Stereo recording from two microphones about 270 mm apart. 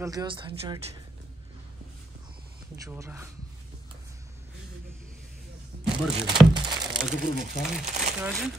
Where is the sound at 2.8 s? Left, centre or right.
Centre.